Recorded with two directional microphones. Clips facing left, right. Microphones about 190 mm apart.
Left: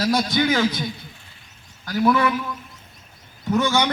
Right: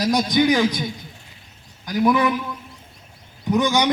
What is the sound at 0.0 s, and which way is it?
A man's voice, 15° right (ahead or behind).